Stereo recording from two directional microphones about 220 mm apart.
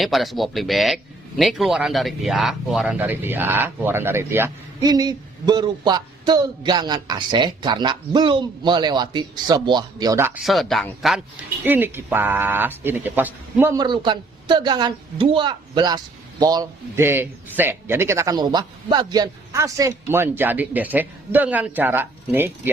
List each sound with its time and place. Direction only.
0.0 s speech: centre (ahead or behind)
10.4 s speech: centre (ahead or behind)